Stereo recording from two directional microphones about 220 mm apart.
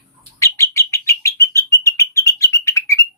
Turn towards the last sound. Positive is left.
turn(degrees=15)  # may be behind; listen again after turning